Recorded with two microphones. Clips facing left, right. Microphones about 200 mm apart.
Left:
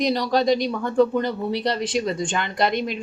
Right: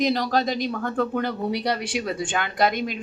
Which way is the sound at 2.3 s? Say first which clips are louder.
Right 2 dB; 55° right (ahead or behind).